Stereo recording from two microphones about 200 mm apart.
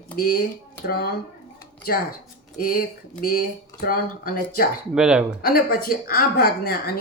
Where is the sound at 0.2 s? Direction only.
50° left (ahead or behind).